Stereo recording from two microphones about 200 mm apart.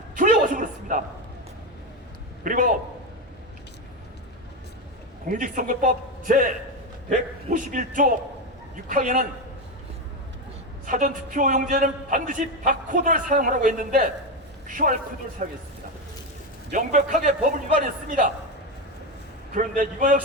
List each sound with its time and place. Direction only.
0.2 s a man's voice: 40° right (ahead or behind)
2.4 s a man's voice: 40° right (ahead or behind)
5.3 s a man's voice: 40° right (ahead or behind)
7.5 s a man's voice: 40° right (ahead or behind)
10.8 s a man's voice: 40° right (ahead or behind)
16.7 s a man's voice: 40° right (ahead or behind)
19.5 s a man's voice: 40° right (ahead or behind)